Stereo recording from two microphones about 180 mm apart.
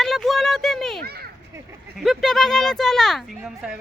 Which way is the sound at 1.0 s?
60° right (ahead or behind).